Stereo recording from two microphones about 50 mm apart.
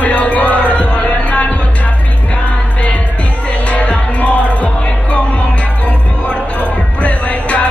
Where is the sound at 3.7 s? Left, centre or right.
Left.